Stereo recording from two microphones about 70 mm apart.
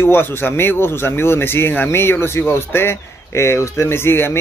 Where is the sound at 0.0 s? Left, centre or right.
Left.